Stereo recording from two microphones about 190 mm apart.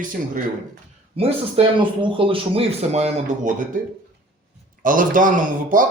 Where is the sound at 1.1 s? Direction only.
30° right (ahead or behind).